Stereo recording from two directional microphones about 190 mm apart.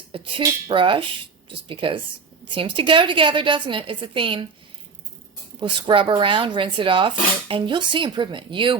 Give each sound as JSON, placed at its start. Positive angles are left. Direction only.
{"t": 0.1, "sound": "speech", "side_deg": -25}
{"t": 5.5, "sound": "speech", "side_deg": -25}